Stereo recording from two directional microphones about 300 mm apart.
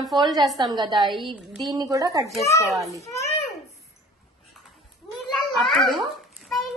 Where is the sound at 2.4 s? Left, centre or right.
Centre.